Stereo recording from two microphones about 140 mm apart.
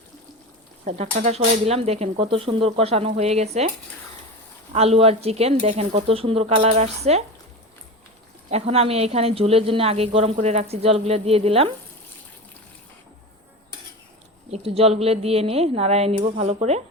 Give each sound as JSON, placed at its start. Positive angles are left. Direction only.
{"t": 0.9, "sound": "speech", "side_deg": -55}
{"t": 4.7, "sound": "speech", "side_deg": -45}
{"t": 8.4, "sound": "speech", "side_deg": -50}
{"t": 14.5, "sound": "speech", "side_deg": -45}